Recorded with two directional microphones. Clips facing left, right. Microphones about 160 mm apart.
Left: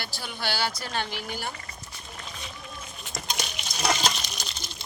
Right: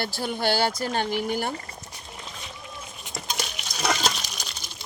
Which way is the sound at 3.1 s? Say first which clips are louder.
Right 1 dB; 5° right (ahead or behind).